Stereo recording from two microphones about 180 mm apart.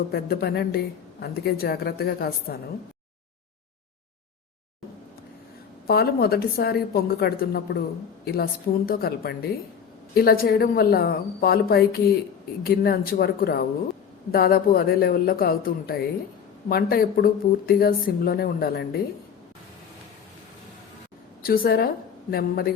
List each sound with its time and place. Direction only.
0.1 s a woman's voice: 60° left (ahead or behind)
5.9 s a woman's voice: 60° left (ahead or behind)
21.4 s a woman's voice: 55° left (ahead or behind)